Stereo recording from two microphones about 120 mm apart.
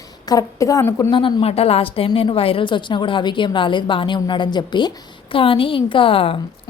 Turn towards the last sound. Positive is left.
turn(degrees=50)  # may be behind; listen again after turning